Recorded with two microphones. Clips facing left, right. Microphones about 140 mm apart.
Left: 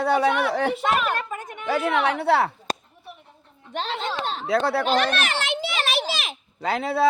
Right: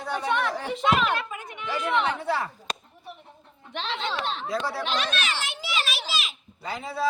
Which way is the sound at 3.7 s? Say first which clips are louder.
Left 3 dB; 45° left (ahead or behind).